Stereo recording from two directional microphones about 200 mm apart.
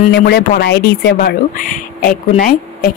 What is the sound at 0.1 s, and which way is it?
Speech, 50° left (ahead or behind).